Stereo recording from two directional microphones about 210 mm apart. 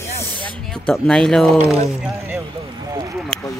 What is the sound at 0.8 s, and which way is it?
Speech, 5° left (ahead or behind).